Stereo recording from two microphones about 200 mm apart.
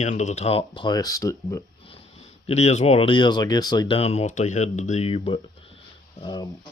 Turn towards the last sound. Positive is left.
turn(degrees=20)  # may be behind; listen again after turning